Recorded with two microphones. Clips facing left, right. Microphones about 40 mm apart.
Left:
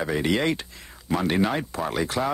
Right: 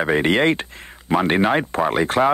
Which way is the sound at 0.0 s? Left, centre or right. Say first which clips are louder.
Right 6 dB; right.